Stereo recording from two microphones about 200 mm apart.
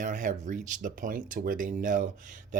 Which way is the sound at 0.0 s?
40° right (ahead or behind).